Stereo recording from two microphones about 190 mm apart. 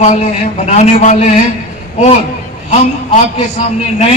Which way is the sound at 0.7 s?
35° left (ahead or behind).